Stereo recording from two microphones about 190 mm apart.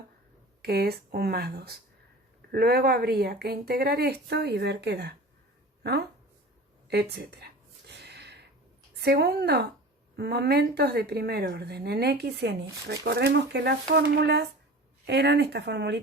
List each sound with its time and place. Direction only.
0.6 s speech: 55° right (ahead or behind)
6.9 s a sound: 60° right (ahead or behind)
9.0 s speech: 60° right (ahead or behind)